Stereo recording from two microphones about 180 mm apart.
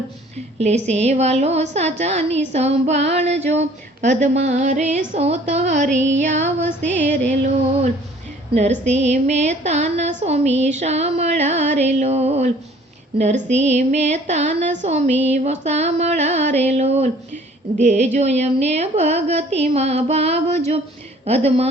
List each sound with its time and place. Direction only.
0.6 s speech: 40° right (ahead or behind)
6.6 s music: 10° left (ahead or behind)
8.8 s speech: 40° right (ahead or behind)